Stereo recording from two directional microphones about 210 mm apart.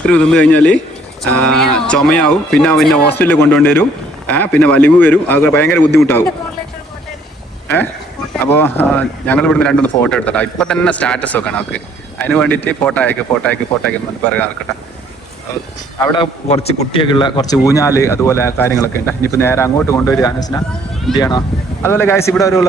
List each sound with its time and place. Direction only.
0.0 s speech: 5° left (ahead or behind)
8.4 s speech: 10° left (ahead or behind)
16.0 s speech: 20° left (ahead or behind)